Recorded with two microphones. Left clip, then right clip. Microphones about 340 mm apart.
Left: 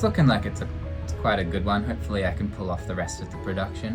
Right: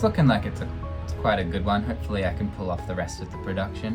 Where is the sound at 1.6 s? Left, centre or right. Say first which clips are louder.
Right 1 dB; right.